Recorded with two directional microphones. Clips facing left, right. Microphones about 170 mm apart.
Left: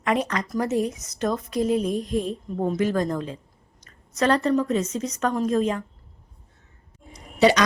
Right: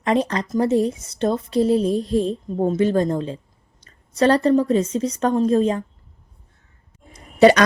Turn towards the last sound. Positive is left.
turn(degrees=-50)  # may be behind; listen again after turning